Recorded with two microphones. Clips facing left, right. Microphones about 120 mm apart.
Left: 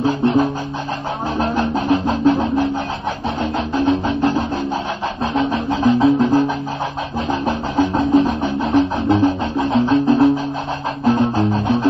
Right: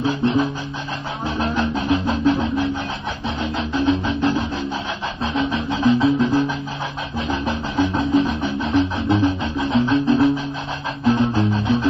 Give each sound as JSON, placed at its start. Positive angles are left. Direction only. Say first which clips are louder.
{"t": 0.0, "sound": "music", "louder": "left 3 dB", "side_deg": 45}